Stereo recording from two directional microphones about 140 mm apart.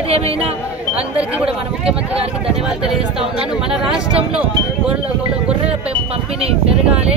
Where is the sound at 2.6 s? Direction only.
5° right (ahead or behind).